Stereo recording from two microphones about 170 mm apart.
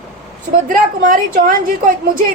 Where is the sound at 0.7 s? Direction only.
55° right (ahead or behind).